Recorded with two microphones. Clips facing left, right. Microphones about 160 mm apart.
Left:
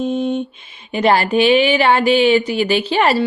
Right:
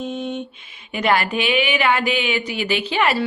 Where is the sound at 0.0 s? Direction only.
35° left (ahead or behind).